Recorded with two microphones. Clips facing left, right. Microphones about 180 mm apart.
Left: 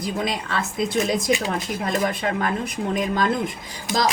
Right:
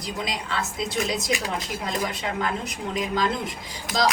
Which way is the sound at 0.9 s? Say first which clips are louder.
Left 5 dB; 55° left (ahead or behind).